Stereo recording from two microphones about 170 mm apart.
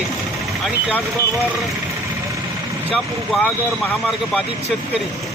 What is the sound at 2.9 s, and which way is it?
Speech, 5° left (ahead or behind).